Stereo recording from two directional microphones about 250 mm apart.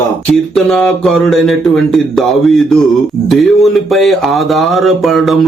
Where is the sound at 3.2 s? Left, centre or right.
Centre.